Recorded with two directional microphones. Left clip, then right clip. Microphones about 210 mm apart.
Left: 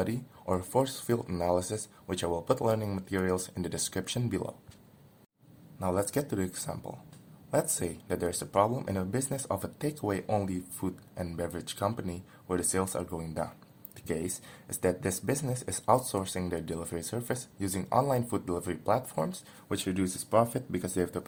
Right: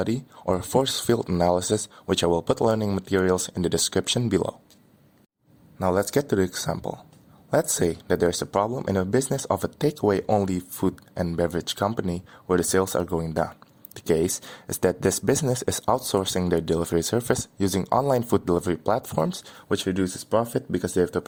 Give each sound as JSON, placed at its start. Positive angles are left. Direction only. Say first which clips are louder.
{"t": 0.0, "sound": "speech", "louder": "right 7 dB", "side_deg": -40}
{"t": 5.8, "sound": "speech", "louder": "right 8 dB", "side_deg": -40}